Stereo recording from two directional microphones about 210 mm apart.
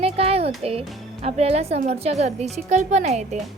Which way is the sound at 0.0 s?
30° right (ahead or behind).